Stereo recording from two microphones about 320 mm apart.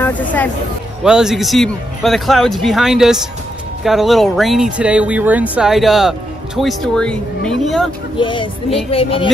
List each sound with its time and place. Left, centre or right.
0.0 s speech: centre
8.2 s speech: centre